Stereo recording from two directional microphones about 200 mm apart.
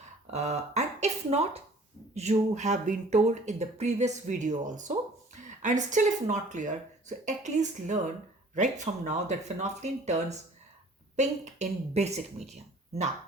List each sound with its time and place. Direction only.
0.3 s speech: 35° right (ahead or behind)